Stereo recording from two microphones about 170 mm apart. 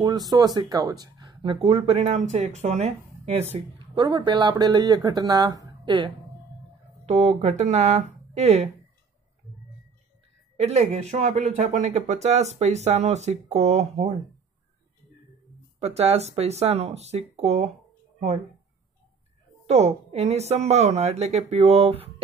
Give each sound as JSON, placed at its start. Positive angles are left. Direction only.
{"t": 0.0, "sound": "speech", "side_deg": -20}
{"t": 3.5, "sound": "speech", "side_deg": -25}
{"t": 7.1, "sound": "speech", "side_deg": -40}
{"t": 10.6, "sound": "speech", "side_deg": -40}
{"t": 15.8, "sound": "speech", "side_deg": -40}
{"t": 19.6, "sound": "speech", "side_deg": -40}